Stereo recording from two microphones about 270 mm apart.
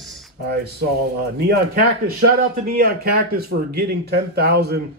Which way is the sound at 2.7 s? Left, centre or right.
Right.